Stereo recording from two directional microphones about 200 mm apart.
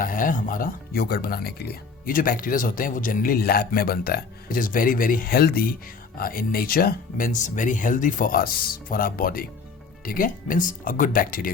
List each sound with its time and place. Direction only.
0.0 s speech: 45° left (ahead or behind)